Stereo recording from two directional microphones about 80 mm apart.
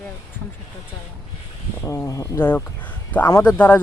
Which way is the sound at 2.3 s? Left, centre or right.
Left.